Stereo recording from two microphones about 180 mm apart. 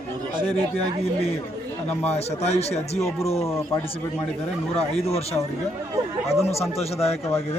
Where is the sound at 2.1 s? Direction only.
35° left (ahead or behind).